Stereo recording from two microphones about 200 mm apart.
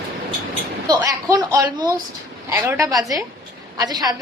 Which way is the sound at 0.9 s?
15° right (ahead or behind).